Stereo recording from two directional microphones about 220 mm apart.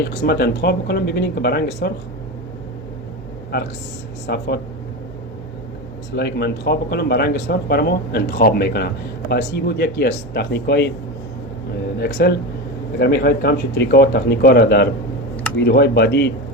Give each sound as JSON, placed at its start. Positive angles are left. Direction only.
{"t": 0.0, "sound": "speech", "side_deg": 50}
{"t": 4.3, "sound": "speech", "side_deg": 50}
{"t": 6.1, "sound": "speech", "side_deg": 50}
{"t": 11.9, "sound": "speech", "side_deg": 50}